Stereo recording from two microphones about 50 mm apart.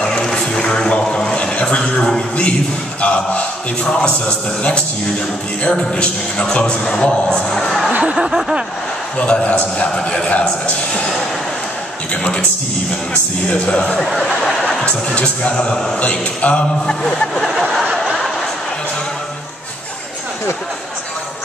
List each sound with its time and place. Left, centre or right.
0.0 s music: centre
1.1 s a man's voice: centre
8.0 s a sound: centre
9.2 s a man's voice: left
12.2 s a man's voice: left
13.7 s a man's voice: centre
16.0 s a man's voice: left
17.5 s a sound: centre